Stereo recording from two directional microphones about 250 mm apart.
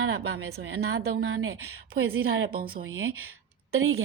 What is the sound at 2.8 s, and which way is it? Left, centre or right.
Speech, right.